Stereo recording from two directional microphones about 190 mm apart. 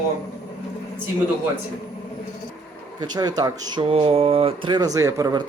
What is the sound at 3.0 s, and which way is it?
Speech, 20° right (ahead or behind).